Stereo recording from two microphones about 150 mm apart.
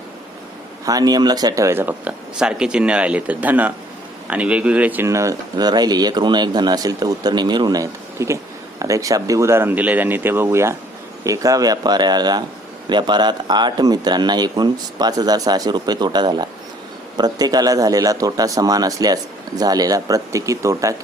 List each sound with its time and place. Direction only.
0.9 s speech: 25° right (ahead or behind)